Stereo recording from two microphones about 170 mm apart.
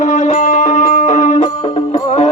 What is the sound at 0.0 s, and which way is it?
Music, 45° left (ahead or behind).